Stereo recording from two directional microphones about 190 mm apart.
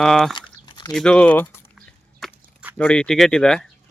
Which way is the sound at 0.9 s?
5° left (ahead or behind).